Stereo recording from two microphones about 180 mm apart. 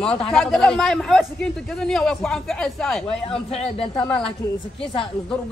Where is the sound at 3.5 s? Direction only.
30° left (ahead or behind).